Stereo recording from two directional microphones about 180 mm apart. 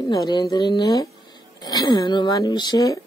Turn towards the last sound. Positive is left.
turn(degrees=20)  # may be behind; listen again after turning